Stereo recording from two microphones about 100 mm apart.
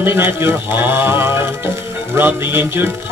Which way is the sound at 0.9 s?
25° right (ahead or behind).